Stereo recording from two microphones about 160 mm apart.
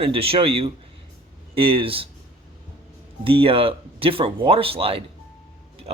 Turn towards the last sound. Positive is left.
turn(degrees=-35)  # may be behind; listen again after turning